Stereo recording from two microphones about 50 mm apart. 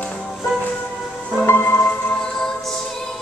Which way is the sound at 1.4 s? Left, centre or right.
Left.